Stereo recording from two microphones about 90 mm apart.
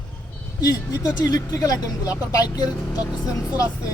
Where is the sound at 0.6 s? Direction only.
40° left (ahead or behind).